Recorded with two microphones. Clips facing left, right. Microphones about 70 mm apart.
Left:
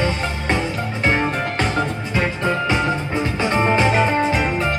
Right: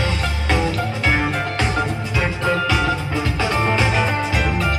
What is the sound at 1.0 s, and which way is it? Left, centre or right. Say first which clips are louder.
Music: left 2 dB; left.